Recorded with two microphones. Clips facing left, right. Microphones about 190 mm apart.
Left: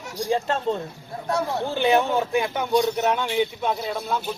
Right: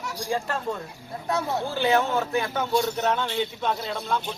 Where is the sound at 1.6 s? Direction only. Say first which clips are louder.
Left 3 dB; 20° left (ahead or behind).